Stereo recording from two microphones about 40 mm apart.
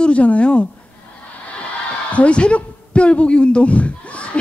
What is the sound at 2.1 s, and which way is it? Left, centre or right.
A woman's voice, left.